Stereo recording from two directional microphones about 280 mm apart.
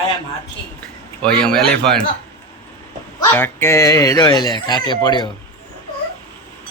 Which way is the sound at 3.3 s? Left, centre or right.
Centre.